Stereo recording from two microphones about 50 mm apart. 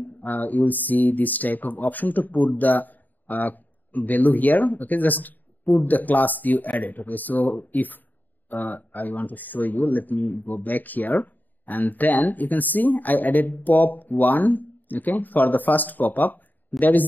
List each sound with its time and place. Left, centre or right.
0.0 s speech: left